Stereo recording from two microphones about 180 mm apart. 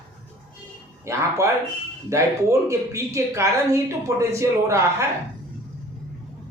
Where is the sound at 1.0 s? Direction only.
15° right (ahead or behind).